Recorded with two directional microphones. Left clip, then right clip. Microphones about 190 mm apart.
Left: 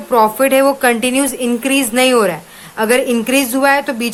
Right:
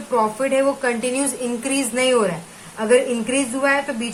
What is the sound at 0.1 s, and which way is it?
A woman's voice, 55° left (ahead or behind).